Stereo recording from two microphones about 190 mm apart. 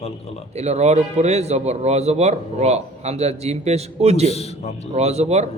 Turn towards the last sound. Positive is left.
turn(degrees=-35)  # may be behind; listen again after turning